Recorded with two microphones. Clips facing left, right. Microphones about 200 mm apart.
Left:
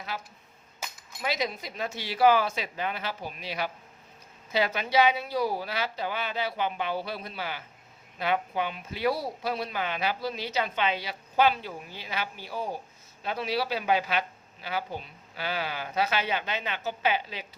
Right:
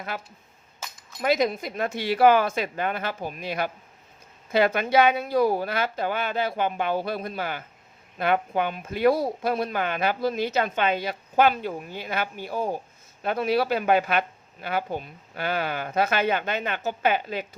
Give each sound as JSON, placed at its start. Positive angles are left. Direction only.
{"t": 0.1, "sound": "a woman's voice", "side_deg": -55}